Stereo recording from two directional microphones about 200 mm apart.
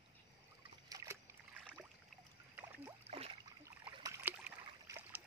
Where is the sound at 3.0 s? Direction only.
30° right (ahead or behind).